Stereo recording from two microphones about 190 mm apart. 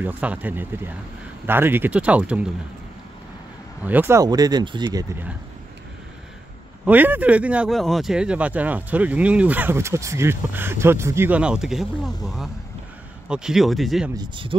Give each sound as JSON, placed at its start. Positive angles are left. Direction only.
{"t": 0.0, "sound": "speech", "side_deg": -10}
{"t": 3.8, "sound": "speech", "side_deg": -10}
{"t": 6.8, "sound": "speech", "side_deg": -10}
{"t": 14.1, "sound": "speech", "side_deg": -25}